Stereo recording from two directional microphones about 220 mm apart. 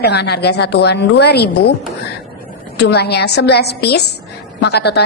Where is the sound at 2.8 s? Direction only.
50° left (ahead or behind).